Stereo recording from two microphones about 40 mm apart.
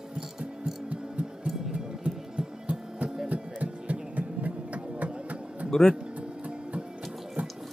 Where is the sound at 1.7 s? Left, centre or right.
Right.